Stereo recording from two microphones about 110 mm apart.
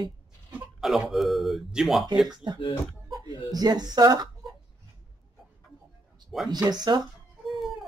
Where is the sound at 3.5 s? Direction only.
35° right (ahead or behind).